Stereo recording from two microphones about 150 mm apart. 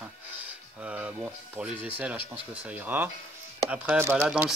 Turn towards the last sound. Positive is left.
turn(degrees=-10)  # may be behind; listen again after turning